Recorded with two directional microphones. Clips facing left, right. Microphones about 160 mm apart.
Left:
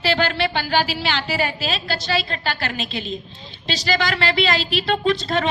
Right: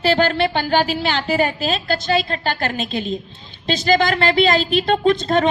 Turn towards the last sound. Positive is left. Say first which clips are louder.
# right 4 dB
turn(degrees=-45)  # may be behind; listen again after turning